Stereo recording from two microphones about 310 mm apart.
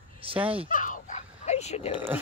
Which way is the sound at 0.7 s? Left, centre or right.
Left.